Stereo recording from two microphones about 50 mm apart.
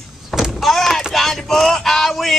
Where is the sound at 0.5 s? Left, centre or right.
Centre.